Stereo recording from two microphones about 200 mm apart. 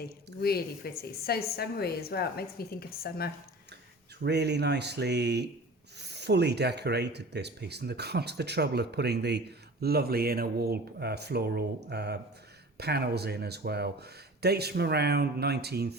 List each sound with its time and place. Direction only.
0.4 s a woman's voice: 50° left (ahead or behind)
4.2 s speech: 55° right (ahead or behind)